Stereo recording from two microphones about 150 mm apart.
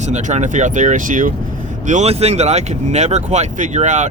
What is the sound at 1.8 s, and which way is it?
Speech, 50° right (ahead or behind).